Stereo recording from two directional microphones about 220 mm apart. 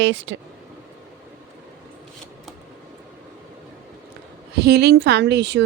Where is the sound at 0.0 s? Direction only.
55° right (ahead or behind).